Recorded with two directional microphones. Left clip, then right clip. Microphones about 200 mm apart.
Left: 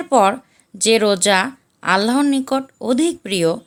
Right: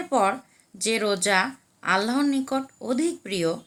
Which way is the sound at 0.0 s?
50° left (ahead or behind).